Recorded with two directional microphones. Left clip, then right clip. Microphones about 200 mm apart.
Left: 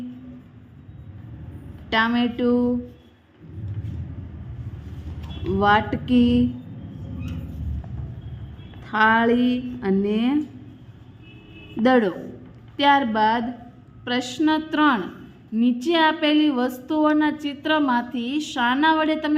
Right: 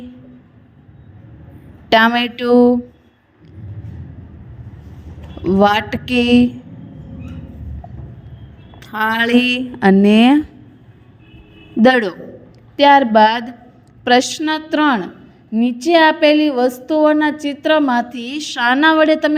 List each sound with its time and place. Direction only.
1.9 s a woman's voice: 40° right (ahead or behind)
5.5 s a woman's voice: 40° right (ahead or behind)
8.9 s a woman's voice: centre (ahead or behind)
9.1 s a woman's voice: 45° right (ahead or behind)
11.8 s a woman's voice: 40° right (ahead or behind)